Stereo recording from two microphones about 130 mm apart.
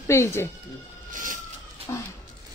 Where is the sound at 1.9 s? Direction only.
25° left (ahead or behind).